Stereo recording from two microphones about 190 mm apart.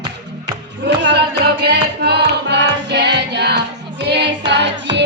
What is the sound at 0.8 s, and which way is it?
Music, 65° right (ahead or behind).